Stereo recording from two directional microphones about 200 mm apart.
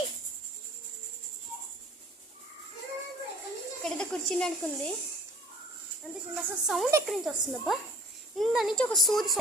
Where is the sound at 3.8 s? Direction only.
5° left (ahead or behind).